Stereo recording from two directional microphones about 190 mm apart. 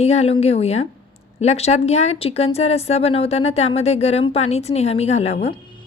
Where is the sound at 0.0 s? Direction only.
35° left (ahead or behind).